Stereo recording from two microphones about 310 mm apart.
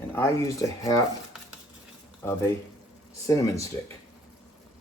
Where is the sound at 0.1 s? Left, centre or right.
Centre.